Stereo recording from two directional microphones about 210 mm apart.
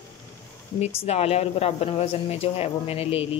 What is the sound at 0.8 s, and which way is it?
Speech, 30° left (ahead or behind).